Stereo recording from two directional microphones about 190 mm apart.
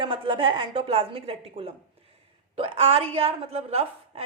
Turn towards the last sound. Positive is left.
turn(degrees=-30)  # may be behind; listen again after turning